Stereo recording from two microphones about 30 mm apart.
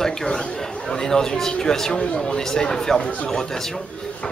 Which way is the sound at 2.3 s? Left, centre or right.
Centre.